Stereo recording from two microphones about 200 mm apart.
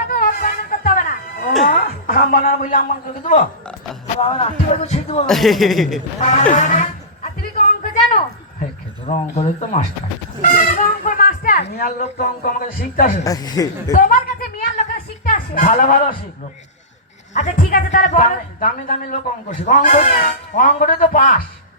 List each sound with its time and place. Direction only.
0.1 s a sound: 45° left (ahead or behind)
3.2 s speech: 40° left (ahead or behind)
5.2 s speech: centre (ahead or behind)
6.1 s speech: 35° left (ahead or behind)
9.0 s a woman's voice: 35° left (ahead or behind)
13.2 s speech: 20° left (ahead or behind)
13.9 s a woman's voice: 40° left (ahead or behind)
14.8 s a sound: 40° left (ahead or behind)
17.3 s a woman's voice: 40° left (ahead or behind)